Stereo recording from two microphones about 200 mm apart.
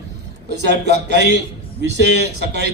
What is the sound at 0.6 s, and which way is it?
A man's voice, 60° right (ahead or behind).